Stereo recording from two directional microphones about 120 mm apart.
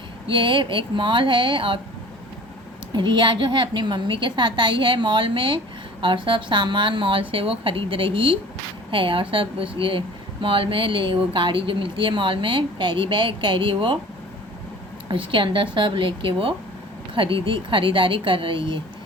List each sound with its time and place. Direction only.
0.3 s speech: 45° right (ahead or behind)
2.9 s a woman's voice: 40° right (ahead or behind)
15.1 s speech: 45° right (ahead or behind)